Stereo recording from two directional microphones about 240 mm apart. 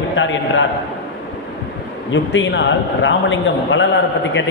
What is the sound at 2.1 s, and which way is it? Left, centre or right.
A man's voice, left.